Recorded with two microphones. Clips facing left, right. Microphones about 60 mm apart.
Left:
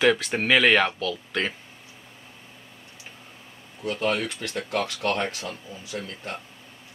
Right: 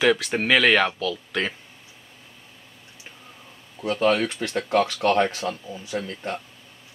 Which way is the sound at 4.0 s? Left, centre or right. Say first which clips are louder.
Right 6 dB; right.